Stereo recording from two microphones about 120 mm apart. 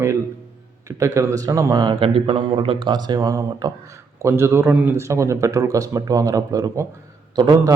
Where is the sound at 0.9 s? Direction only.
25° right (ahead or behind).